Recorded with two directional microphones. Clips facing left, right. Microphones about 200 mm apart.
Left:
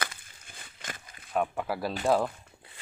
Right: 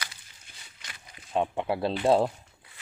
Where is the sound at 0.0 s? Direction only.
55° left (ahead or behind).